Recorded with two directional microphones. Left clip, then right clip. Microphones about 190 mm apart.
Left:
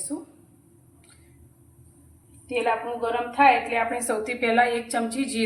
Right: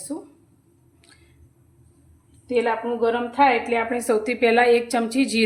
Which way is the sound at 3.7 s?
55° right (ahead or behind).